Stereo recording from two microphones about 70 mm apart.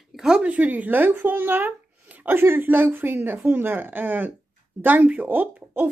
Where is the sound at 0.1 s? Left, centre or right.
Centre.